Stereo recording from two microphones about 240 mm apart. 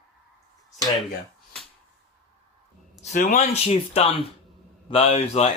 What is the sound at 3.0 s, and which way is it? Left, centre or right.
Speech, left.